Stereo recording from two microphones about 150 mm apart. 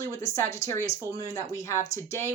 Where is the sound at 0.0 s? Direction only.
20° left (ahead or behind).